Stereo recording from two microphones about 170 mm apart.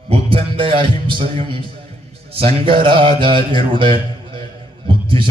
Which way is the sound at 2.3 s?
35° right (ahead or behind).